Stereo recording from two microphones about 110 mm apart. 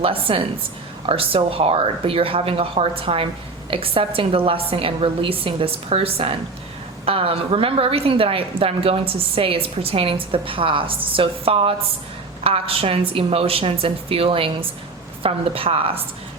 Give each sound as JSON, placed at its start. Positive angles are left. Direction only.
{"t": 0.0, "sound": "a woman's voice", "side_deg": -55}